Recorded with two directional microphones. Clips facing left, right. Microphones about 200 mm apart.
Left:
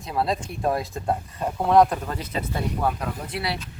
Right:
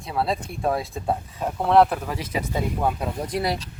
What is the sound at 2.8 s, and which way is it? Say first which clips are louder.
Speech: even; 25° right (ahead or behind).